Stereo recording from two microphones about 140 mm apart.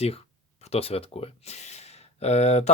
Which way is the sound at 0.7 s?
45° left (ahead or behind).